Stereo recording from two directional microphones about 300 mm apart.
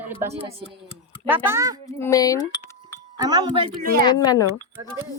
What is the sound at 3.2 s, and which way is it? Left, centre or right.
Speech, centre.